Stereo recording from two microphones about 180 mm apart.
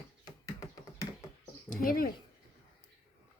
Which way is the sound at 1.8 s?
55° left (ahead or behind).